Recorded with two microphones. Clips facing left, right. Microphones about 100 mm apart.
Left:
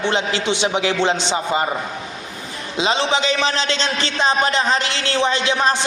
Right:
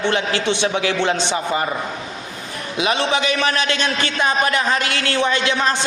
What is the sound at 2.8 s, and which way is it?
A man's voice, 25° left (ahead or behind).